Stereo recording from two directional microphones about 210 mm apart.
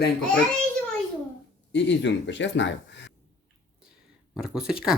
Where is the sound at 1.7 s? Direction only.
60° left (ahead or behind).